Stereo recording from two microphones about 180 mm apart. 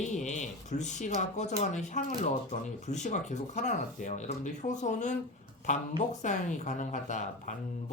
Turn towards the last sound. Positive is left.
turn(degrees=40)  # may be behind; listen again after turning